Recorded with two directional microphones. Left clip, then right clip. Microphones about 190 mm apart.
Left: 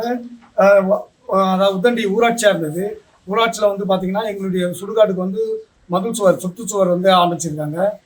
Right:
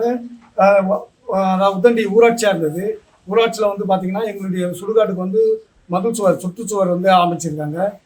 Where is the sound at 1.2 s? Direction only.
15° right (ahead or behind).